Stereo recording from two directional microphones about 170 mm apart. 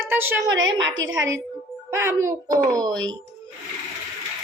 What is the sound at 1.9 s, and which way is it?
A child's voice, 15° right (ahead or behind).